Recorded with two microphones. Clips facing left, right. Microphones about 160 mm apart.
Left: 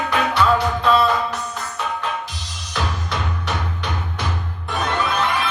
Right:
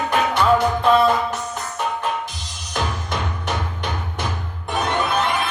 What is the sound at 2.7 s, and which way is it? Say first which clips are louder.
Music: right 1 dB; 50° right (ahead or behind).